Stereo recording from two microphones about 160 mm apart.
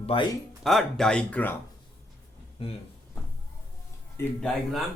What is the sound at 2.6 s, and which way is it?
Speech, 35° left (ahead or behind).